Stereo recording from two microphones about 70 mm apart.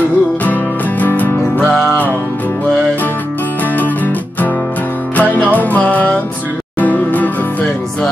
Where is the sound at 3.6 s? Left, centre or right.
Left.